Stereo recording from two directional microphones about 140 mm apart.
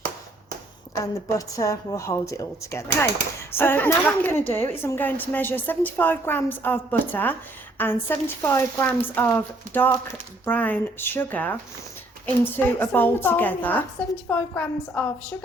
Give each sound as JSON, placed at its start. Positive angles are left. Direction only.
{"t": 1.0, "sound": "a woman's voice", "side_deg": 25}